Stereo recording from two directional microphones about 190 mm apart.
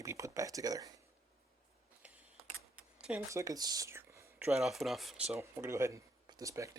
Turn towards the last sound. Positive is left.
turn(degrees=-15)  # may be behind; listen again after turning